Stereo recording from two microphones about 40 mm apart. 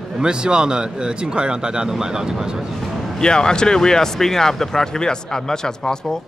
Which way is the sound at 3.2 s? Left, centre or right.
Centre.